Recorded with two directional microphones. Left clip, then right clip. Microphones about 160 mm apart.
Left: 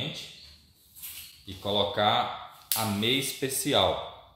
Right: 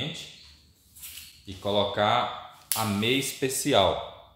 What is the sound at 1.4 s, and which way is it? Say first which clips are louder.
Speech: right 2 dB; 25° right (ahead or behind).